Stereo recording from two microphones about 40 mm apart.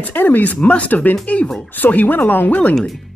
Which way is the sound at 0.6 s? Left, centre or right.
Left.